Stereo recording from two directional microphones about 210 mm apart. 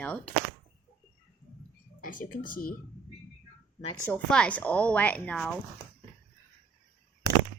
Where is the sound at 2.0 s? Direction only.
40° left (ahead or behind).